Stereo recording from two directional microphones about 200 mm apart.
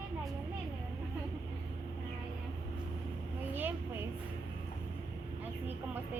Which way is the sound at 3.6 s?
10° right (ahead or behind).